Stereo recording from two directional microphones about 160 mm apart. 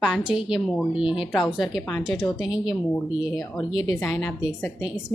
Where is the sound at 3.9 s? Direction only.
15° left (ahead or behind).